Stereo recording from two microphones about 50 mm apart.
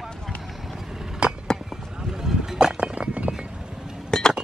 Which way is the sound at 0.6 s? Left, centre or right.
Centre.